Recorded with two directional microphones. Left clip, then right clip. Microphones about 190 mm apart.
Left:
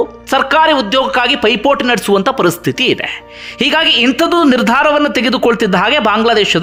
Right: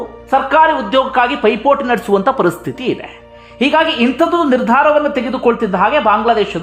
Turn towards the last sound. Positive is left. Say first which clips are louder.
# left 2 dB
turn(degrees=25)  # may be behind; listen again after turning